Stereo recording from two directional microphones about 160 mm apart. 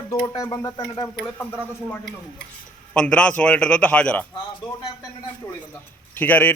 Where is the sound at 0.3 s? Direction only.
20° left (ahead or behind).